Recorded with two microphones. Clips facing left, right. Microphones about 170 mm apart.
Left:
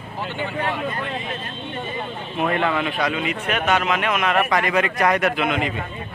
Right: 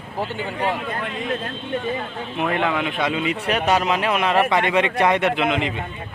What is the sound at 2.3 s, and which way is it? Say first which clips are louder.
Speech: left 1 dB; 10° right (ahead or behind).